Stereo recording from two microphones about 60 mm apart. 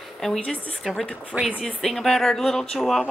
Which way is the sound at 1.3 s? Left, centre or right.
Right.